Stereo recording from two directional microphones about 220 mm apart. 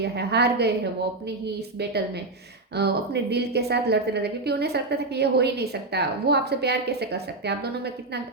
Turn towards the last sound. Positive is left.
turn(degrees=-50)  # may be behind; listen again after turning